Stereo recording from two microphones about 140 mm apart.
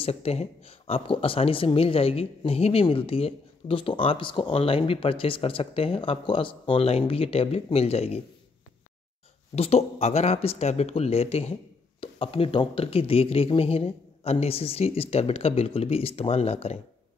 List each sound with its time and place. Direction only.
0.0 s speech: 45° left (ahead or behind)
9.6 s speech: 45° left (ahead or behind)